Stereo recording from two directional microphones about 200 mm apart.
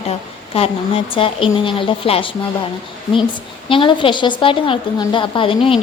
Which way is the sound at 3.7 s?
25° left (ahead or behind).